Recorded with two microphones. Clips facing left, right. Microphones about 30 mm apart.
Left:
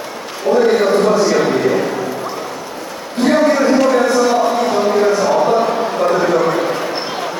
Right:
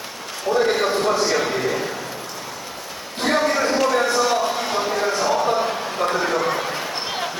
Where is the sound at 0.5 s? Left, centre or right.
Centre.